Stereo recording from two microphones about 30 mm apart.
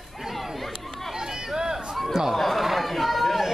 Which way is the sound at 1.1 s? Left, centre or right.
Centre.